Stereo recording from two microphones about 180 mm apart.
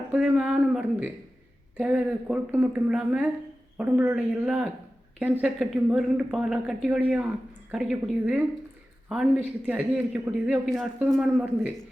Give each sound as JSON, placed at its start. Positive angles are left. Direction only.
{"t": 0.1, "sound": "speech", "side_deg": -5}